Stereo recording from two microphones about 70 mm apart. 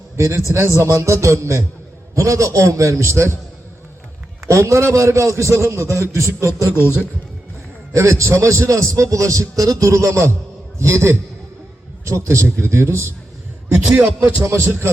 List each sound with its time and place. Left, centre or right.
0.2 s a man's voice: right
4.4 s a man's voice: right
7.9 s a man's voice: right
13.9 s music: right